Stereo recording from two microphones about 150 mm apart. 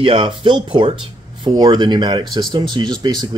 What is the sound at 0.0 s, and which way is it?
Speech, 35° right (ahead or behind).